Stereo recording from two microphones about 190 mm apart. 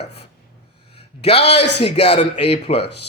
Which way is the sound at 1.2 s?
30° left (ahead or behind).